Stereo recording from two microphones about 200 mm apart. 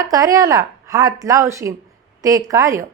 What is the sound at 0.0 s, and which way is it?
A woman's voice, 15° right (ahead or behind).